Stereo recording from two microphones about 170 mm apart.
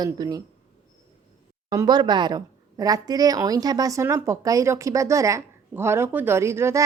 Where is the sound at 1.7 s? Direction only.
25° right (ahead or behind).